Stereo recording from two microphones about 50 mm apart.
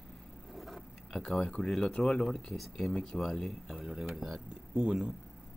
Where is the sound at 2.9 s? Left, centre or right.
Centre.